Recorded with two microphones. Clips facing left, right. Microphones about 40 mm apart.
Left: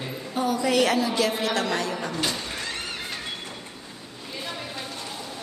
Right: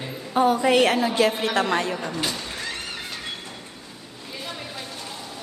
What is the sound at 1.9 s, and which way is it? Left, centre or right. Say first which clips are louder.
Speech: even; centre.